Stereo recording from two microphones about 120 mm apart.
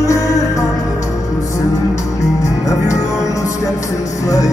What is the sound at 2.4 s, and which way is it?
Music, 25° left (ahead or behind).